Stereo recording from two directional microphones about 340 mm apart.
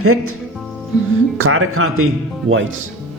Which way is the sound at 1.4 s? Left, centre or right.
Right.